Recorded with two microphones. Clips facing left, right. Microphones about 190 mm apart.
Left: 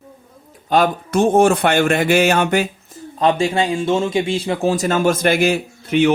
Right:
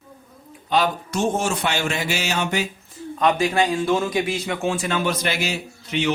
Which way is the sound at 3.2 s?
30° left (ahead or behind).